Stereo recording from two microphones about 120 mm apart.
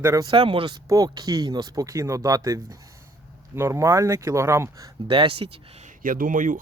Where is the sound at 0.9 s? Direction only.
30° right (ahead or behind).